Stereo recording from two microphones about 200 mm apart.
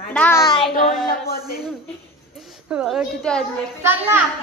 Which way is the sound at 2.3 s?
Centre (ahead or behind).